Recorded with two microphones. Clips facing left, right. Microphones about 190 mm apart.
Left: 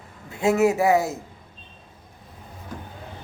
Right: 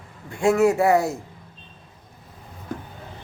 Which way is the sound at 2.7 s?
55° right (ahead or behind).